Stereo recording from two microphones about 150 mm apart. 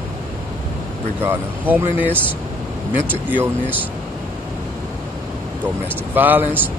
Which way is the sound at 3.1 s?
10° right (ahead or behind).